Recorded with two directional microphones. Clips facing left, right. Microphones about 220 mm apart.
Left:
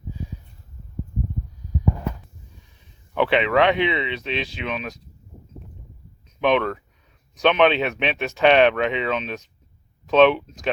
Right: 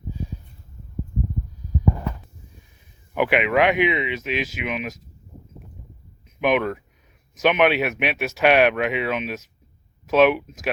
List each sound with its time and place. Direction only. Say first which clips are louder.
3.2 s speech: left 1 dB; 10° right (ahead or behind)
6.4 s speech: left 1 dB; 10° right (ahead or behind)